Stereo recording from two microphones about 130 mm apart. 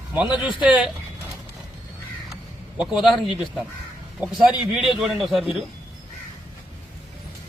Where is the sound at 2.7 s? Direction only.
Centre (ahead or behind).